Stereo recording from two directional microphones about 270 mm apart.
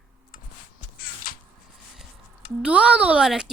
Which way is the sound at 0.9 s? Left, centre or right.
Left.